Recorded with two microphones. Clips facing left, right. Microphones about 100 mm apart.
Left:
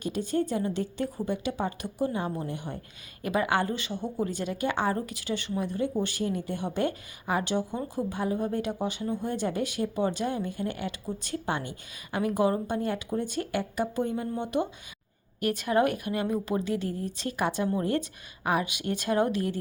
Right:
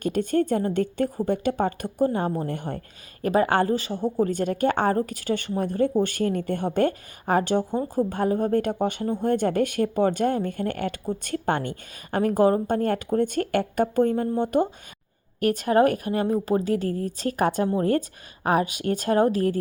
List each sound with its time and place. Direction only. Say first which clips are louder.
0.0 s a woman's voice: right 6 dB; 55° right (ahead or behind)